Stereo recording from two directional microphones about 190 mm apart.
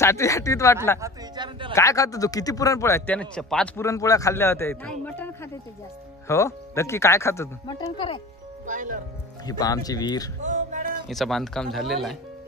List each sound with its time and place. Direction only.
0.0 s a man's voice: 15° left (ahead or behind)
0.9 s speech: 20° right (ahead or behind)
1.8 s a man's voice: 15° left (ahead or behind)
5.0 s a sound: 10° left (ahead or behind)
6.2 s a man's voice: 15° left (ahead or behind)
8.6 s speech: 45° right (ahead or behind)
9.5 s speech: 20° left (ahead or behind)
10.4 s music: 40° right (ahead or behind)
11.1 s speech: centre (ahead or behind)